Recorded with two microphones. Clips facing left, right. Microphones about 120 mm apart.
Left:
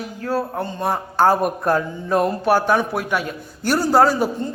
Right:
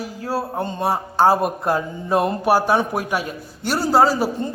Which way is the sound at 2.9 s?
40° right (ahead or behind).